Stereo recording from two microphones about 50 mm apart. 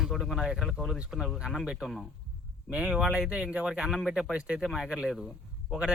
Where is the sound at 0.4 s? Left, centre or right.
Centre.